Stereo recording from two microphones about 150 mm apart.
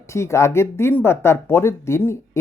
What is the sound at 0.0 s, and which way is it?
Speech, 20° left (ahead or behind).